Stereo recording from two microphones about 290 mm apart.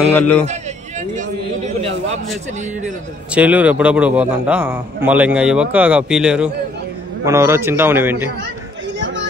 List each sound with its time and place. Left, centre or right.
0.1 s a man's voice: centre
0.5 s a sound: right
3.3 s a man's voice: centre